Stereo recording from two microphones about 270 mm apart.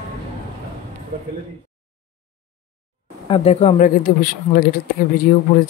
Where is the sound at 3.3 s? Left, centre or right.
Left.